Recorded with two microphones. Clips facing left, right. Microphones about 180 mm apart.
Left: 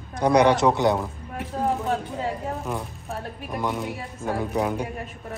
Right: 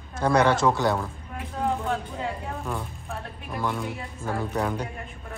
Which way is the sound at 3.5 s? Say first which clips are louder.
Left 1 dB; 20° left (ahead or behind).